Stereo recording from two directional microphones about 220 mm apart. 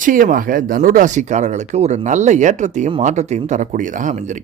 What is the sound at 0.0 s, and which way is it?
Speech, 35° right (ahead or behind).